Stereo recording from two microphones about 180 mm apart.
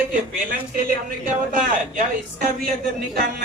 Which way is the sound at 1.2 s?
50° right (ahead or behind).